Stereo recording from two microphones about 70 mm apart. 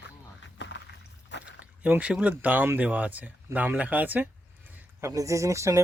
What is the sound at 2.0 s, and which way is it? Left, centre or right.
Speech, centre.